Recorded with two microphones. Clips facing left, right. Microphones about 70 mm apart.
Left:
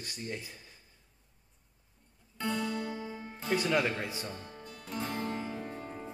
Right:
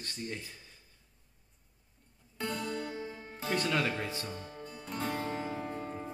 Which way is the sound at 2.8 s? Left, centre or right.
Centre.